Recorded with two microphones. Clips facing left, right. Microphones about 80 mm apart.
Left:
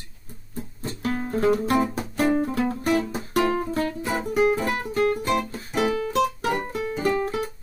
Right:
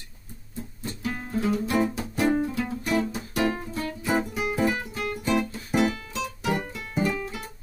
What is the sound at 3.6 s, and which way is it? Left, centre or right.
Music, left.